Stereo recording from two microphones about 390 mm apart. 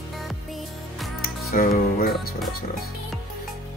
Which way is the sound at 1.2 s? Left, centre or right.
Left.